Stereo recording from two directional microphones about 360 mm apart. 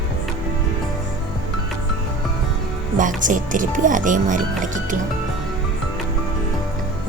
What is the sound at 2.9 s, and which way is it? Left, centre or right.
Speech, right.